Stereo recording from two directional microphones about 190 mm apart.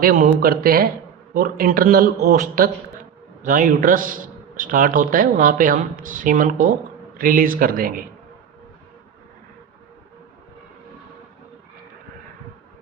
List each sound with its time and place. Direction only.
0.0 s a man's voice: 50° right (ahead or behind)